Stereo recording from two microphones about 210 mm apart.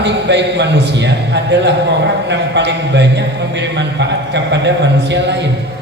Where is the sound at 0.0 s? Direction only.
55° right (ahead or behind).